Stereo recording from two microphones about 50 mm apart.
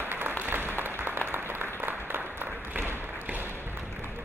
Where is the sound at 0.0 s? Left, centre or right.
Right.